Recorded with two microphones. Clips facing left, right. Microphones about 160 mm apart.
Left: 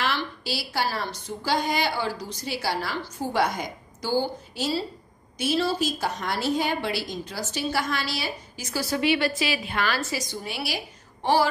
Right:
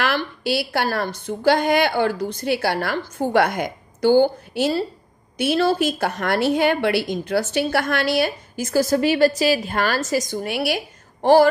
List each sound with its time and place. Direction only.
0.0 s a woman's voice: 60° right (ahead or behind)